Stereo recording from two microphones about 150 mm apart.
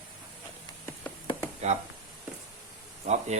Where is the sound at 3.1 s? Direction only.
50° right (ahead or behind).